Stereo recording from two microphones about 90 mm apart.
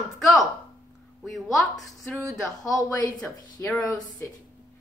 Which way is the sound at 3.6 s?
25° left (ahead or behind).